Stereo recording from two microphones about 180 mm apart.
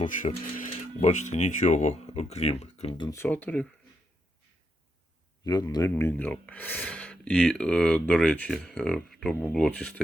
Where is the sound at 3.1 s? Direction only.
10° left (ahead or behind).